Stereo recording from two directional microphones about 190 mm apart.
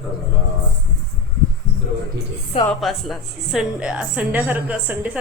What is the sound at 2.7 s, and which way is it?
A woman's voice, centre (ahead or behind).